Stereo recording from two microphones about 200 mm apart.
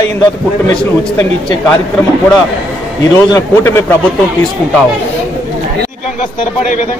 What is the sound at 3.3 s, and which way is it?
Speech, 15° left (ahead or behind).